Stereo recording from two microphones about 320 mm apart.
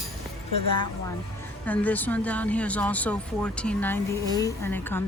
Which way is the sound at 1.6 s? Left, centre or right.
Centre.